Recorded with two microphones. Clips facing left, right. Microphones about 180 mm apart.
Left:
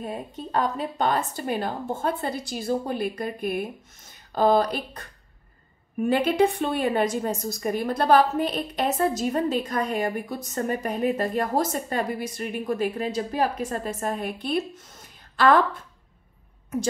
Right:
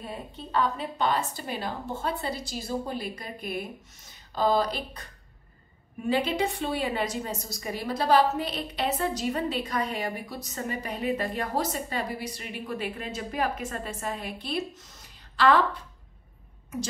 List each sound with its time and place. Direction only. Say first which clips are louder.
0.0 s a woman's voice: left 5 dB; 45° left (ahead or behind)
6.0 s a woman's voice: left 5 dB; 50° left (ahead or behind)